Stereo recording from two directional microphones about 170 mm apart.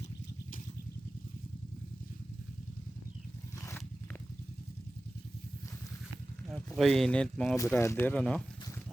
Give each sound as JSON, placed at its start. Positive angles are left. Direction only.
{"t": 3.6, "sound": "a sound", "side_deg": 15}
{"t": 6.5, "sound": "speech", "side_deg": 0}
{"t": 7.5, "sound": "speech", "side_deg": 15}